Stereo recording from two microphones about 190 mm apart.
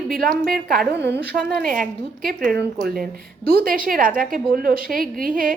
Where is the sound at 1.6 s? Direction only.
45° right (ahead or behind).